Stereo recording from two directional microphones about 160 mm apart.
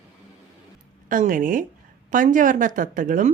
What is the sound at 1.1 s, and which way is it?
Speech, 55° right (ahead or behind).